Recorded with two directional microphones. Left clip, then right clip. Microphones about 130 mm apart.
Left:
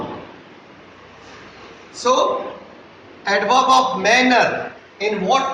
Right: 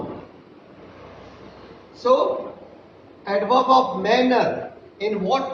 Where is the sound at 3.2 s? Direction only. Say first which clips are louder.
Left 3 dB; 10° left (ahead or behind).